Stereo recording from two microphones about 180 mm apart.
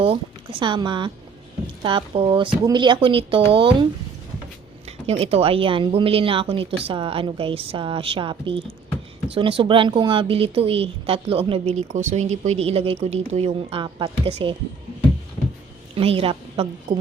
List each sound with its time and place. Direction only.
0.6 s speech: 25° right (ahead or behind)
4.9 s a woman's voice: 35° right (ahead or behind)
16.0 s a woman's voice: 30° right (ahead or behind)